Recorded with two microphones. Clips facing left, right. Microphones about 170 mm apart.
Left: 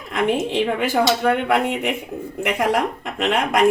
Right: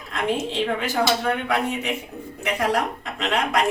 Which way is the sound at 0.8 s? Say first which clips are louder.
Left 4 dB; 55° left (ahead or behind).